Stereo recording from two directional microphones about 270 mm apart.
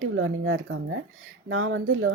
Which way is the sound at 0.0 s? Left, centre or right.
Right.